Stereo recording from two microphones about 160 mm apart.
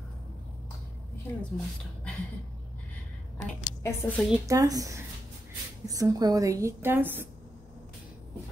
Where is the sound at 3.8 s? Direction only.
15° left (ahead or behind).